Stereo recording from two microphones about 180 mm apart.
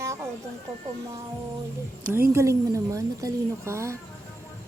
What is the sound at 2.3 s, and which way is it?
Speech, 15° right (ahead or behind).